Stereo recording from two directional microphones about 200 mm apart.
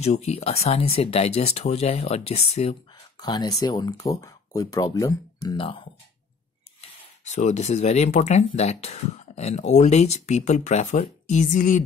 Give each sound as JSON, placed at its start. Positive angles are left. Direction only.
{"t": 0.0, "sound": "speech", "side_deg": 30}
{"t": 2.9, "sound": "speech", "side_deg": 20}